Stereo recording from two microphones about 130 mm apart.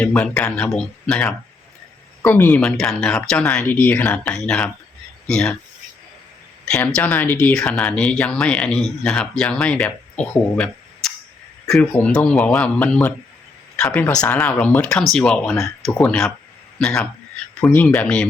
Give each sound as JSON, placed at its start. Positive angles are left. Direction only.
{"t": 0.0, "sound": "speech", "side_deg": 10}
{"t": 2.2, "sound": "speech", "side_deg": 15}
{"t": 2.6, "sound": "speech", "side_deg": 5}
{"t": 6.7, "sound": "speech", "side_deg": 10}